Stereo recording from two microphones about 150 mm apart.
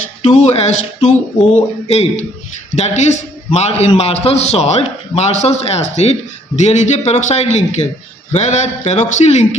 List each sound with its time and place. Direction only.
0.2 s a man's voice: 45° left (ahead or behind)